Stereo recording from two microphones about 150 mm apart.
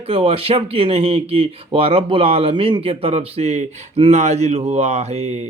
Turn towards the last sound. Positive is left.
turn(degrees=-45)  # may be behind; listen again after turning